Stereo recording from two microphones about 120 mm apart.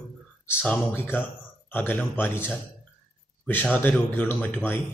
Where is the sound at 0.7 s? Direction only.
15° left (ahead or behind).